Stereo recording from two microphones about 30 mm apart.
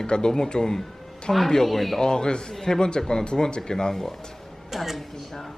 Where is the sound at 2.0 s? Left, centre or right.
Left.